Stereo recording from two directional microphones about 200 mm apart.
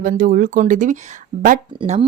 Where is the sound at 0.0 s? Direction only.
45° right (ahead or behind).